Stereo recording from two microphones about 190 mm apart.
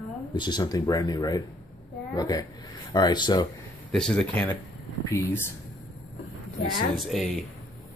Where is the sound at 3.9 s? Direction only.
5° left (ahead or behind).